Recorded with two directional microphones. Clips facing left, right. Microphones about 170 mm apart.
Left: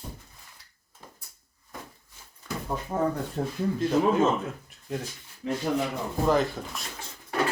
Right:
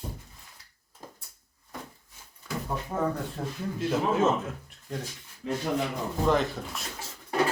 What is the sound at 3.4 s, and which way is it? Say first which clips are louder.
Speech: left 4 dB; 35° left (ahead or behind).